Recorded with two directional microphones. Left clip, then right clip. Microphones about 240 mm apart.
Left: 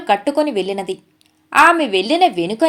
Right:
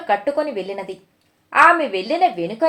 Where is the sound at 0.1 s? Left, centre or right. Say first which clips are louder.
Left 3 dB; left.